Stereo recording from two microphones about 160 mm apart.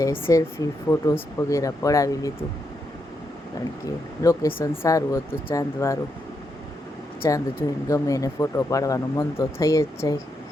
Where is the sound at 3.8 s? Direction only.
20° left (ahead or behind).